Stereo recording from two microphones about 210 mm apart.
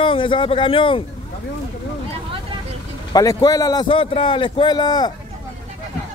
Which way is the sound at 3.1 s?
15° left (ahead or behind).